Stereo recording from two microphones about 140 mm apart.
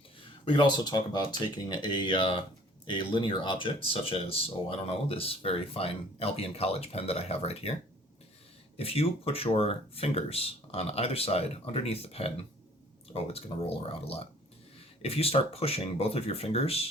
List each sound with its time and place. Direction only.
0.4 s speech: 35° left (ahead or behind)
15.0 s speech: 45° left (ahead or behind)